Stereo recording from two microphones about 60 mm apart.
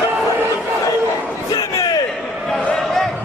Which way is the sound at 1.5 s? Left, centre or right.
Left.